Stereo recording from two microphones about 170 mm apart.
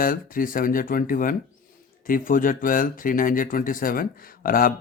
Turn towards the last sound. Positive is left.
turn(degrees=55)  # may be behind; listen again after turning